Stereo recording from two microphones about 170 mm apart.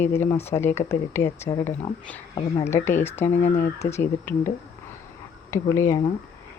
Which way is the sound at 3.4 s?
45° left (ahead or behind).